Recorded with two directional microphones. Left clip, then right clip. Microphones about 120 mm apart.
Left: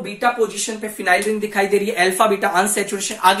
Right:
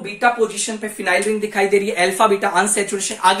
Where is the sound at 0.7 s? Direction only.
20° right (ahead or behind).